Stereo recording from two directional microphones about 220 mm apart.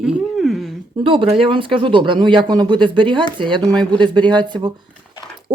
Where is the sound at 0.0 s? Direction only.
Centre (ahead or behind).